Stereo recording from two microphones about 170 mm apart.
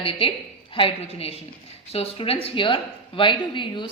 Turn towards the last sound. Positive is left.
turn(degrees=30)  # may be behind; listen again after turning